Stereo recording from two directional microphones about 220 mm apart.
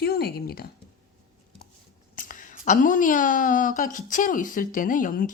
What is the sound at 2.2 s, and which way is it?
A woman's voice, 35° left (ahead or behind).